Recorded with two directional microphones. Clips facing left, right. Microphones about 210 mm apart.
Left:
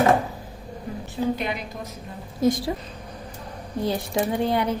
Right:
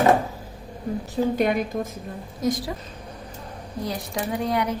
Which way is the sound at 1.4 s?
50° right (ahead or behind).